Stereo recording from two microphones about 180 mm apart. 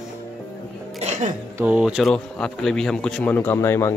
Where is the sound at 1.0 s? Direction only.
40° right (ahead or behind).